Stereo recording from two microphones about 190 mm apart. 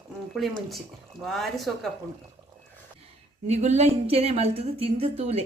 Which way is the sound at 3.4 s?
35° right (ahead or behind).